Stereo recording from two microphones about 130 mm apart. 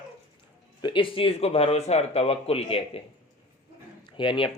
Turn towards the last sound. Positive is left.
turn(degrees=40)  # may be behind; listen again after turning